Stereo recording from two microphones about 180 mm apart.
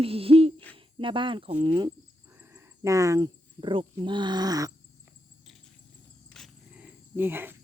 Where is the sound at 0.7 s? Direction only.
30° right (ahead or behind).